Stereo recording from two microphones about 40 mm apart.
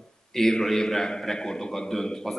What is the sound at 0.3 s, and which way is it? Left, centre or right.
A man's voice, centre.